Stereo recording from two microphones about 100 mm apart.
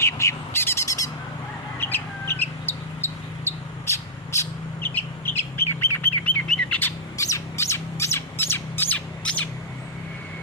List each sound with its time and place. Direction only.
0.0 s bird: 30° left (ahead or behind)
1.8 s bird: 20° left (ahead or behind)
7.2 s squawk: 30° left (ahead or behind)
9.2 s bird: 15° left (ahead or behind)